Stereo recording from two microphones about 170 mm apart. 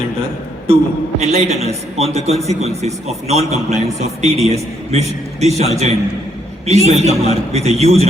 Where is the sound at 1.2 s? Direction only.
40° right (ahead or behind).